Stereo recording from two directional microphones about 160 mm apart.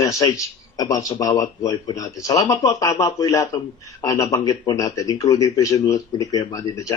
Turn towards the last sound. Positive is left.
turn(degrees=20)  # may be behind; listen again after turning